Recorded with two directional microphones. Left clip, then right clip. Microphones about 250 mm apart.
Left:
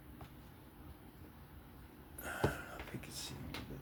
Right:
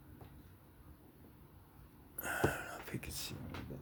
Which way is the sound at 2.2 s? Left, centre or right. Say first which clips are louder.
Right 3 dB; right.